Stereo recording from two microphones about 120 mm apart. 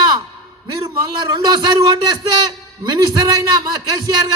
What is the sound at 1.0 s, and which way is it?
A man's voice, 35° right (ahead or behind).